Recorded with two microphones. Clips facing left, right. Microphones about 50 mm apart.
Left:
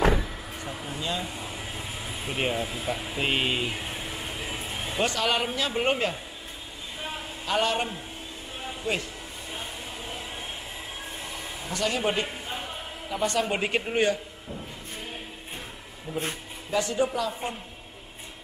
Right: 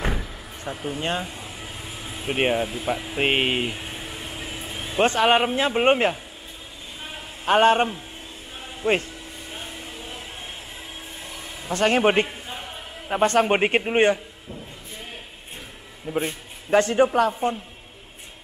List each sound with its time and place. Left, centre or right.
0.8 s speech: right
4.9 s speech: right
7.4 s speech: right
11.7 s a man's voice: right
16.1 s a man's voice: right